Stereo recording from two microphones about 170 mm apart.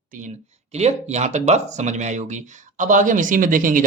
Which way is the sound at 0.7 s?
40° right (ahead or behind).